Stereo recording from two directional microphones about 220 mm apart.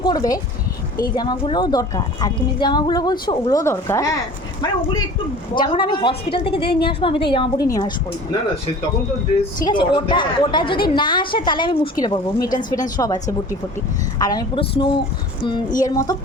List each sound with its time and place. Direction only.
0.0 s speech: 20° left (ahead or behind)
5.5 s speech: 20° left (ahead or behind)
9.4 s speech: 20° left (ahead or behind)
14.2 s speech: 15° left (ahead or behind)